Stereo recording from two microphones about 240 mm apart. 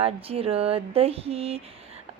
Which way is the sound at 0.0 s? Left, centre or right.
Right.